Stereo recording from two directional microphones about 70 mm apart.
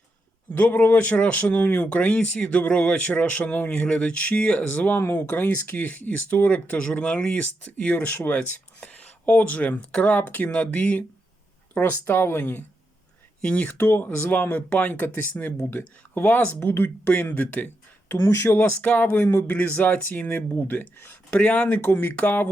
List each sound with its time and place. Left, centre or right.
0.5 s speech: left
18.1 s speech: left
19.2 s speech: left
19.5 s speech: left